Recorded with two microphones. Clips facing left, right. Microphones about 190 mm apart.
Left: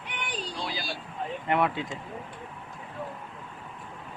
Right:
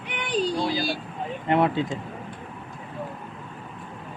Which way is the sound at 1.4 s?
25° right (ahead or behind).